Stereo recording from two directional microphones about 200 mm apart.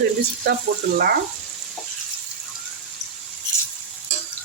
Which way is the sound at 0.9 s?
50° right (ahead or behind).